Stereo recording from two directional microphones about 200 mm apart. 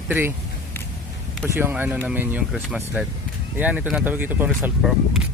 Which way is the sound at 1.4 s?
10° right (ahead or behind).